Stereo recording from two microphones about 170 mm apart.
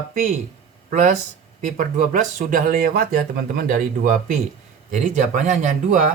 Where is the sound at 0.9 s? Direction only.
50° right (ahead or behind).